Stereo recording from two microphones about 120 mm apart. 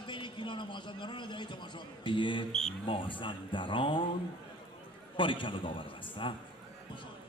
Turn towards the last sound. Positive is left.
turn(degrees=45)  # may be behind; listen again after turning